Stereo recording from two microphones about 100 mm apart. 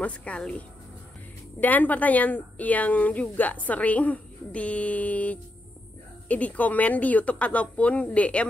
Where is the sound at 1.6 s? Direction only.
15° left (ahead or behind).